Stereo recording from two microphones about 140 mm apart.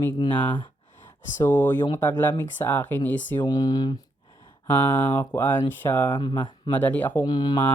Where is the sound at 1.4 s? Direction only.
15° left (ahead or behind).